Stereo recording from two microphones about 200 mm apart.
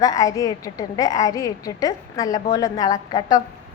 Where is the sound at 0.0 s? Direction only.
15° left (ahead or behind).